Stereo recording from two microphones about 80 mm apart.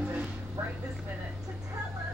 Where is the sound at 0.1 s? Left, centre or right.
Centre.